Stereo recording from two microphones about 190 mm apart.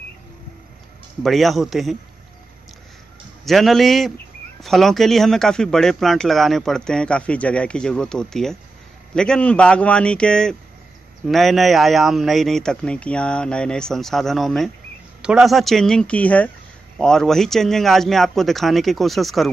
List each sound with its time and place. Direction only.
1.2 s speech: centre (ahead or behind)
3.4 s speech: centre (ahead or behind)